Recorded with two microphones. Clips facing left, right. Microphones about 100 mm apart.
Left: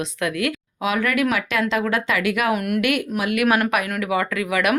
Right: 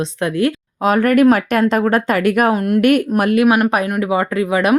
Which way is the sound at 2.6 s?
30° right (ahead or behind).